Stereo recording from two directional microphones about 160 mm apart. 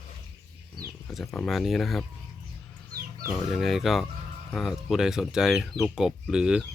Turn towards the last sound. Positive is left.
turn(degrees=-5)  # may be behind; listen again after turning